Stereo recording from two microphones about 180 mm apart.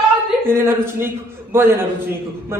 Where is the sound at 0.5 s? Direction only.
15° right (ahead or behind).